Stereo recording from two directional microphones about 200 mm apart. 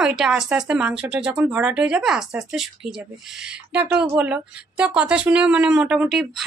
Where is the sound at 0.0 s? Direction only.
Centre (ahead or behind).